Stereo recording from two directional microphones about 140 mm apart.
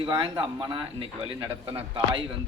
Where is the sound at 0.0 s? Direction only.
40° right (ahead or behind).